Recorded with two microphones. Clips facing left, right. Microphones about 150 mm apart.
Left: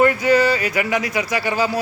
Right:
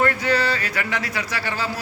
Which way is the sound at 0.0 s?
10° left (ahead or behind).